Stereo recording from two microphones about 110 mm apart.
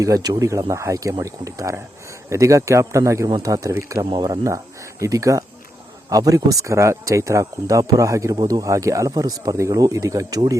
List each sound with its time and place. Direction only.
0.0 s speech: 35° right (ahead or behind)
4.1 s speech: 40° right (ahead or behind)
4.4 s speech: 30° right (ahead or behind)